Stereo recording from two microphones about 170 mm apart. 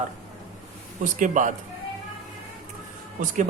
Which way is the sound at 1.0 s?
50° right (ahead or behind).